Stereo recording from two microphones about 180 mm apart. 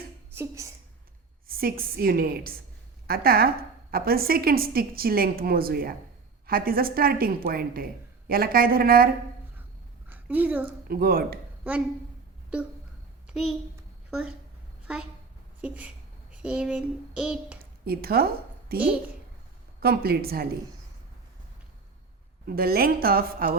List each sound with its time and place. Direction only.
0.3 s a woman's voice: 15° right (ahead or behind)
1.5 s a woman's voice: 55° right (ahead or behind)
10.1 s a woman's voice: 10° right (ahead or behind)
10.8 s a woman's voice: 55° right (ahead or behind)
13.3 s a child's voice: centre (ahead or behind)
15.6 s a woman's voice: 10° right (ahead or behind)
17.8 s a woman's voice: 60° right (ahead or behind)
22.4 s a woman's voice: 55° right (ahead or behind)